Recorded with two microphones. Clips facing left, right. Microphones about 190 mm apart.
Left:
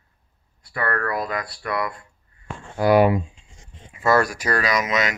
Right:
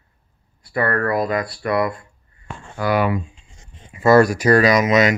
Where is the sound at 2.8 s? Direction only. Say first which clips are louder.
Left 3 dB; 30° left (ahead or behind).